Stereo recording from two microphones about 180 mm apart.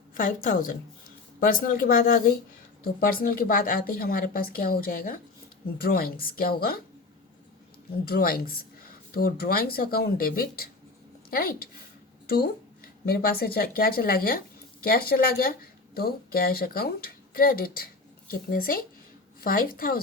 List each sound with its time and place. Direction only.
0.1 s a woman's voice: 50° left (ahead or behind)
8.0 s speech: 55° left (ahead or behind)